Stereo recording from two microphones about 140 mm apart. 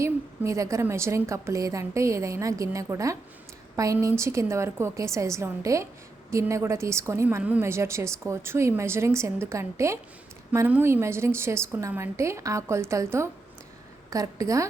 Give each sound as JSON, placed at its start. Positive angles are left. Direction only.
{"t": 0.0, "sound": "a woman's voice", "side_deg": -20}